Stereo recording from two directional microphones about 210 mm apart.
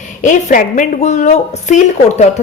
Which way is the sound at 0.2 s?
35° left (ahead or behind).